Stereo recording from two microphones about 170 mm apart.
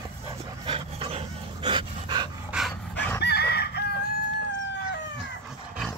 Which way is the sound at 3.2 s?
70° left (ahead or behind).